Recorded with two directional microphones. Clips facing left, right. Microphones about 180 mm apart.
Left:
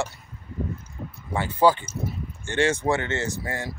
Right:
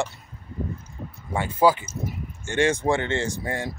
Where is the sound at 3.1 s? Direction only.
30° right (ahead or behind).